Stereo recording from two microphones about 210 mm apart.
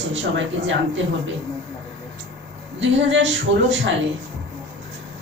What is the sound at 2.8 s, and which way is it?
Speech, 60° right (ahead or behind).